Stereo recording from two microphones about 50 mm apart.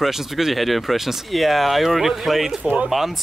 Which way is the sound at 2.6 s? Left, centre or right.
Right.